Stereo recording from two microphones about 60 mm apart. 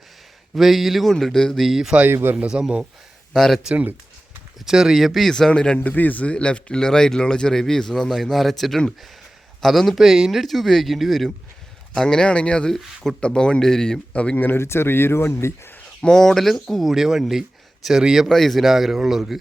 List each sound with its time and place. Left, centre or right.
0.5 s speech: centre
1.6 s speech: centre
2.0 s a man's voice: right
2.5 s speech: centre
3.3 s speech: centre
4.6 s speech: centre
5.3 s speech: centre
5.8 s speech: left; by 11.3 s centre
11.9 s speech: centre
14.4 s speech: left
16.0 s speech: centre
16.9 s speech: centre
18.3 s speech: centre